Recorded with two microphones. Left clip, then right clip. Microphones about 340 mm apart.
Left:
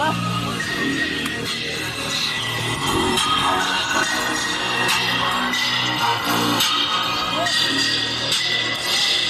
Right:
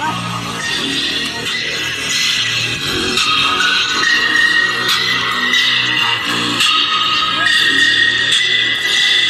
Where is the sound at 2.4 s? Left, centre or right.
Left.